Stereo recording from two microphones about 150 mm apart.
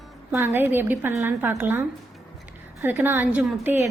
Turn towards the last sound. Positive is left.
turn(degrees=-15)  # may be behind; listen again after turning